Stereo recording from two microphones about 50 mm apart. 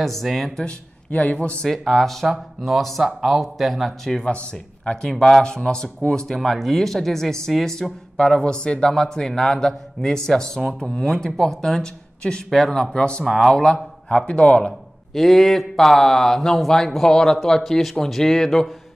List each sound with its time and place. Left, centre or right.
0.0 s speech: centre
1.1 s speech: left
1.7 s speech: centre
3.0 s speech: centre
4.1 s speech: centre
12.2 s speech: centre
12.4 s speech: centre
13.2 s speech: centre
14.0 s speech: left
15.1 s speech: centre